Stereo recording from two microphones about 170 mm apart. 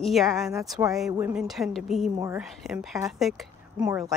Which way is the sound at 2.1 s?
15° right (ahead or behind).